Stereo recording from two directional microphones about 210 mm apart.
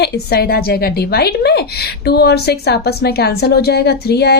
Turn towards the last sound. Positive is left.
turn(degrees=50)  # may be behind; listen again after turning